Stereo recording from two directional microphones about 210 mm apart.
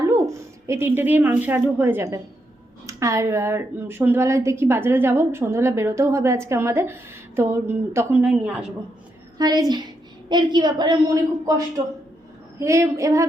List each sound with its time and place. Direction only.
0.0 s speech: 15° right (ahead or behind)
9.4 s a woman's voice: 20° right (ahead or behind)